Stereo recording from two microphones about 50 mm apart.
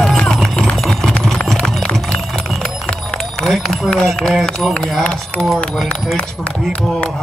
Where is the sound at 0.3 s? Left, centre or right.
Centre.